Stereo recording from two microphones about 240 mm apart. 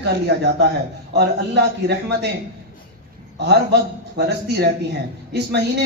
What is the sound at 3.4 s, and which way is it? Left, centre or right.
Speech, right.